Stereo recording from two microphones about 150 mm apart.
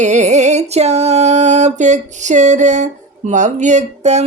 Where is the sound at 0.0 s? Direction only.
50° right (ahead or behind).